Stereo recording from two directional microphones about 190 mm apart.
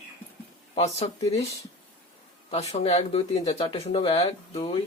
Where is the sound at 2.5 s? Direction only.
35° left (ahead or behind).